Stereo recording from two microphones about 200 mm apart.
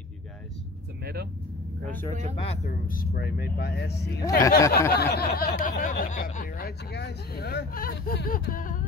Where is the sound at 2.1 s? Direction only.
35° right (ahead or behind).